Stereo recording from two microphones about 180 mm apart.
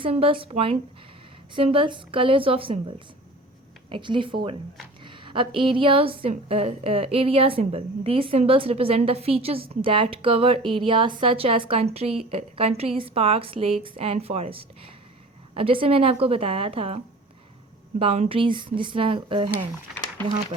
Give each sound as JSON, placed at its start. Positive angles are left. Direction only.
{"t": 0.0, "sound": "a woman's voice", "side_deg": -30}
{"t": 3.8, "sound": "a woman's voice", "side_deg": -30}
{"t": 18.0, "sound": "speech", "side_deg": -30}